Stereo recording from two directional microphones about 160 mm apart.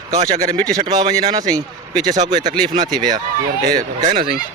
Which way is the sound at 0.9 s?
25° right (ahead or behind).